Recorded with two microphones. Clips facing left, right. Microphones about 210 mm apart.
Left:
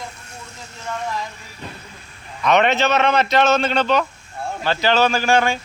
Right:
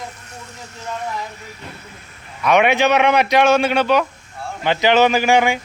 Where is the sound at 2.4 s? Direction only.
10° right (ahead or behind).